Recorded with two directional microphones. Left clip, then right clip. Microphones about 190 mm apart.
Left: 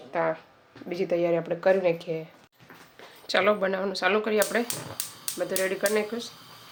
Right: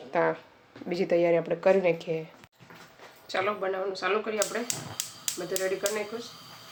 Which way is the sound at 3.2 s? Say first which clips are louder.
Left 6 dB; 60° left (ahead or behind).